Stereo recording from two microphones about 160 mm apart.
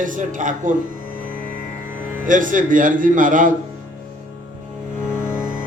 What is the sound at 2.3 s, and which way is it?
Speech, 55° right (ahead or behind).